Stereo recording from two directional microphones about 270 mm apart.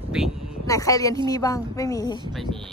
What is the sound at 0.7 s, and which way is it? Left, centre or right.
Speech, centre.